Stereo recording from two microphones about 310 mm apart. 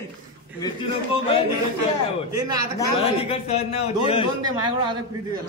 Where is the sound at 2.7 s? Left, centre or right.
Centre.